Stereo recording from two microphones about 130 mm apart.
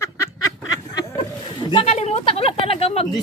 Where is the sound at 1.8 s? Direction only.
60° left (ahead or behind).